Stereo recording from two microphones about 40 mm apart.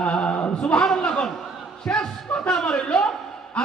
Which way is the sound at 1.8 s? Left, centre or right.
Centre.